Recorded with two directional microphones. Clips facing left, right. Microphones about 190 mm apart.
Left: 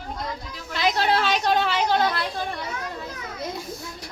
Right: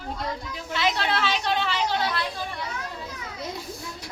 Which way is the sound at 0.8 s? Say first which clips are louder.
Left 4 dB; 40° left (ahead or behind).